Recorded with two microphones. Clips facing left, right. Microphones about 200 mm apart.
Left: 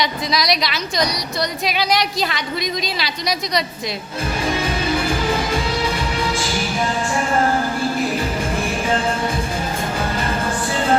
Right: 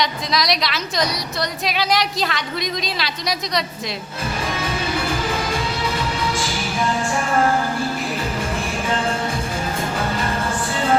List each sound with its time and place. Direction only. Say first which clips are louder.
0.0 s a woman's voice: left 1 dB; centre (ahead or behind)